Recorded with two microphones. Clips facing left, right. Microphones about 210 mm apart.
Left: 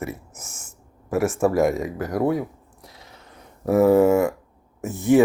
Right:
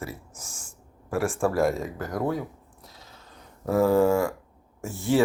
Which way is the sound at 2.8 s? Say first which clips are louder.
Left 4 dB; 65° left (ahead or behind).